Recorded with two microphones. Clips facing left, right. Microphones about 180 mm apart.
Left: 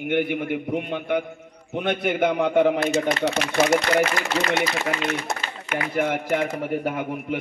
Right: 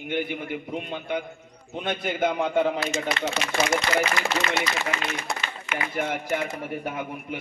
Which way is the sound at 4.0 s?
50° left (ahead or behind).